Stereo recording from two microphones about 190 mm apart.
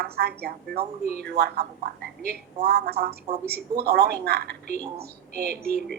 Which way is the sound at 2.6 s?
55° right (ahead or behind).